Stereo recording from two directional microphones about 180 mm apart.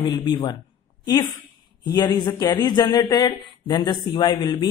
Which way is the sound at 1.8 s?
20° left (ahead or behind).